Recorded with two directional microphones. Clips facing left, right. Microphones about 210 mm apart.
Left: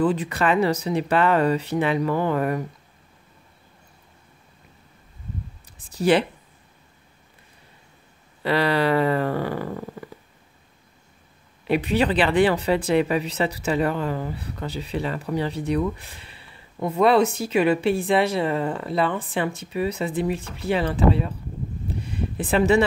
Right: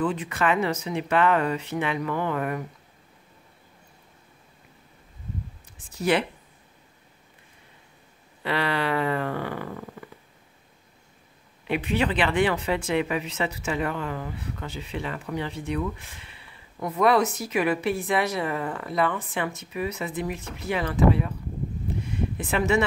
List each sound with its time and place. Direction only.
0.0 s speech: 35° left (ahead or behind)
5.9 s speech: 35° left (ahead or behind)
8.4 s speech: 35° left (ahead or behind)
11.6 s speech: 35° left (ahead or behind)
22.1 s a sound: 35° left (ahead or behind)